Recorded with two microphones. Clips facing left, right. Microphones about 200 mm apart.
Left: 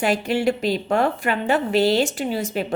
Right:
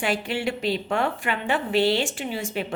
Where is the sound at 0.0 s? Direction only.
40° left (ahead or behind).